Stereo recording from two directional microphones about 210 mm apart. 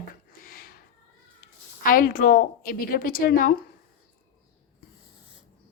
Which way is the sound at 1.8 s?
40° left (ahead or behind).